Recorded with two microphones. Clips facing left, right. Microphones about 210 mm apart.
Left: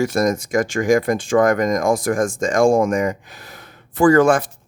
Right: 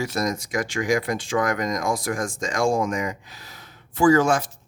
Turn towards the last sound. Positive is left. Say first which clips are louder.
# left 5 dB
turn(degrees=55)  # may be behind; listen again after turning